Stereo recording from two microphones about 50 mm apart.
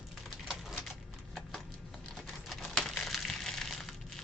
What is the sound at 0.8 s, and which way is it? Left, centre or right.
Horse, centre.